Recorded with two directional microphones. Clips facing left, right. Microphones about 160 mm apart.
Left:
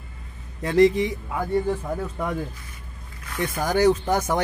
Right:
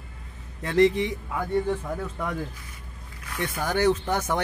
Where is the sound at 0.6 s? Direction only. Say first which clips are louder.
Left 3 dB; 10° left (ahead or behind).